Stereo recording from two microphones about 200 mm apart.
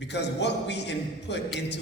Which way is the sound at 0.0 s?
60° left (ahead or behind).